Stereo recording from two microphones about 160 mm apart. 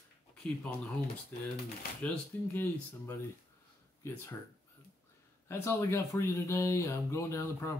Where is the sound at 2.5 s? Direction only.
15° left (ahead or behind).